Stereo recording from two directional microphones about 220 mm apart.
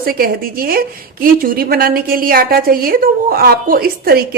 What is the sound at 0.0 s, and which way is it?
A woman's voice, 40° right (ahead or behind).